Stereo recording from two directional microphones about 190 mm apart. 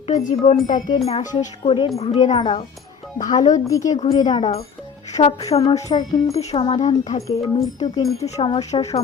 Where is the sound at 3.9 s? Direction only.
30° left (ahead or behind).